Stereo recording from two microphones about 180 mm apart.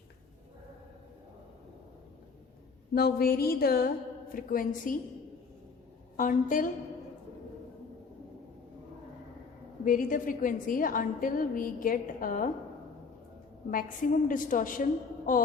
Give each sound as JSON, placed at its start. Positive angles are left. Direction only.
{"t": 2.9, "sound": "a sound", "side_deg": 60}
{"t": 4.4, "sound": "a woman's voice", "side_deg": 50}
{"t": 6.1, "sound": "a woman's voice", "side_deg": 45}
{"t": 9.8, "sound": "a woman's voice", "side_deg": 50}
{"t": 13.7, "sound": "a woman's voice", "side_deg": 50}